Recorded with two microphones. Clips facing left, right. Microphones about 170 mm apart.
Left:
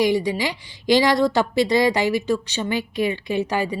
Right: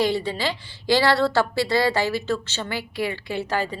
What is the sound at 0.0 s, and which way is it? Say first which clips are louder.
A woman's voice: left 3 dB; 15° left (ahead or behind).